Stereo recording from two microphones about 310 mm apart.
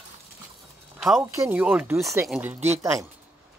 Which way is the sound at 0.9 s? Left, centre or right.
Centre.